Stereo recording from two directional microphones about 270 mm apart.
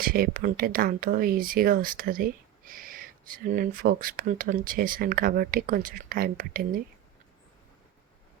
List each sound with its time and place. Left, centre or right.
0.0 s speech: right